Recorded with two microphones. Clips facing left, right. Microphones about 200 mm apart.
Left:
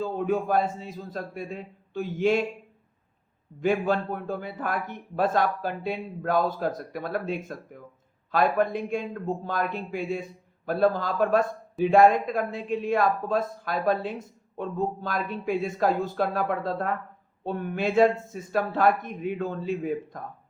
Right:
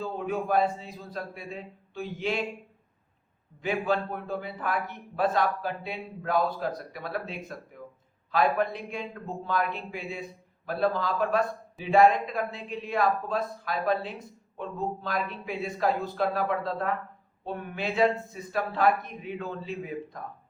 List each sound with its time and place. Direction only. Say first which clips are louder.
0.0 s a man's voice: left 4 dB; 45° left (ahead or behind)
3.6 s a man's voice: left 4 dB; 45° left (ahead or behind)